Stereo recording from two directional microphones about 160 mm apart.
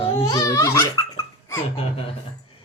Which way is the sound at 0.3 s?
20° left (ahead or behind).